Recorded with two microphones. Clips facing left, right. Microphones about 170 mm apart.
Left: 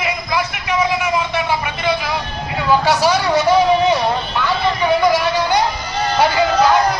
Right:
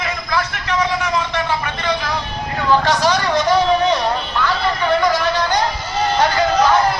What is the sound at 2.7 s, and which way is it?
Vehicle, 10° left (ahead or behind).